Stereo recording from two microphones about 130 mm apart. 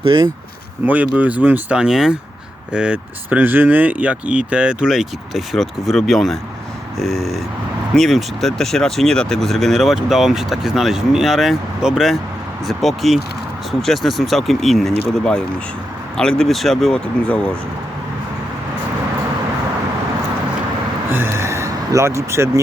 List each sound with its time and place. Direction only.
0.0 s speech: 40° right (ahead or behind)
0.9 s speech: 10° right (ahead or behind); by 17.4 s 10° left (ahead or behind)
21.1 s a sound: 20° right (ahead or behind)